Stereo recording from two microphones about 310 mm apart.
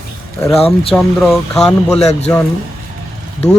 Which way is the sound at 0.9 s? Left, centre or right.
Centre.